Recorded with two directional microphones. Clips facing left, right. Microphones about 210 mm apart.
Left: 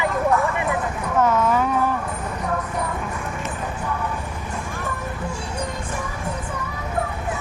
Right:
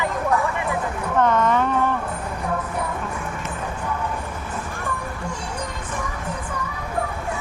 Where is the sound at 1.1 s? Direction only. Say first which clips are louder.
Even; 5° left (ahead or behind).